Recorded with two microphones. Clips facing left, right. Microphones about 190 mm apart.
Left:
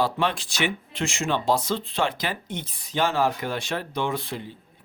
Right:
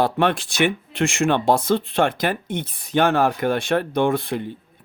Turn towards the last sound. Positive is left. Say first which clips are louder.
# right 8 dB
turn(degrees=-55)  # may be behind; listen again after turning